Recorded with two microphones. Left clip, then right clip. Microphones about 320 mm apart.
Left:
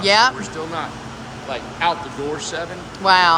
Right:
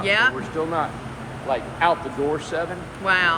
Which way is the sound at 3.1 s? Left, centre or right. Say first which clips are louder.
Left 6 dB; centre.